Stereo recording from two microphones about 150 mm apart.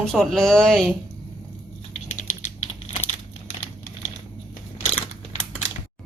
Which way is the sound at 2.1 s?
55° left (ahead or behind).